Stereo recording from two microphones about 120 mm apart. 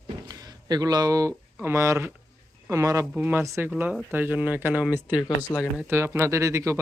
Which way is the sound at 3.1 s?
15° right (ahead or behind).